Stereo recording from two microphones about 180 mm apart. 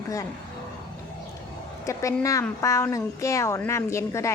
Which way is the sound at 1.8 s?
15° left (ahead or behind).